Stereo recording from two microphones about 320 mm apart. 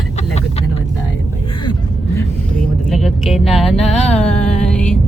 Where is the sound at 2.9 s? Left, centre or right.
Centre.